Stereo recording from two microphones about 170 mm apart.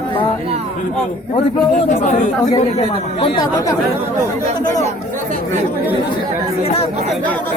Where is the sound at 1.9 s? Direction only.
50° left (ahead or behind).